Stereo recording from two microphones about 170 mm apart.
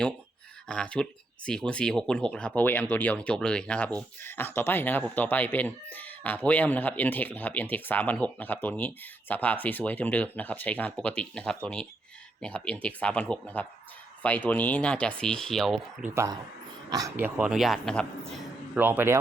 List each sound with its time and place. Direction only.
0.7 s speech: 5° left (ahead or behind)
16.0 s speech: 15° right (ahead or behind); by 18.3 s 5° left (ahead or behind)
18.7 s speech: 10° right (ahead or behind)